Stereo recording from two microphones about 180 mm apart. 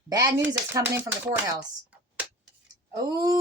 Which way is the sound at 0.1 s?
15° right (ahead or behind).